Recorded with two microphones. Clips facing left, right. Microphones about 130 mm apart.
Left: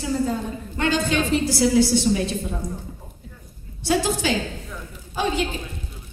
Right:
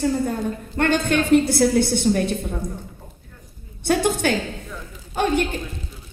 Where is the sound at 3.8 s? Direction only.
60° right (ahead or behind).